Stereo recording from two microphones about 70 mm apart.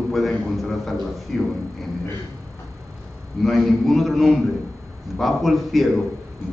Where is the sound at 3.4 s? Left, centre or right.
Centre.